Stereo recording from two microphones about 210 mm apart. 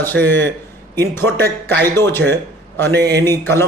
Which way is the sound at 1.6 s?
10° left (ahead or behind).